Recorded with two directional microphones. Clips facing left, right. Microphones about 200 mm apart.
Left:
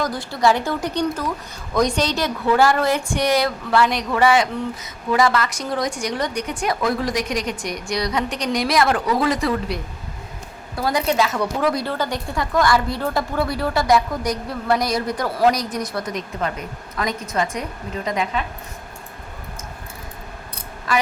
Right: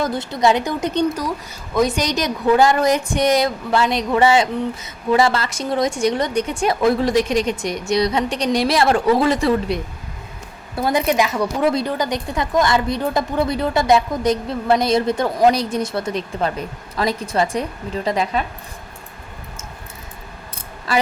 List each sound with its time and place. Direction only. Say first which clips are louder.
0.0 s a woman's voice: right 2 dB; 25° right (ahead or behind)
1.7 s a woman's voice: right 1 dB; 5° right (ahead or behind); by 18.4 s 35° right (ahead or behind)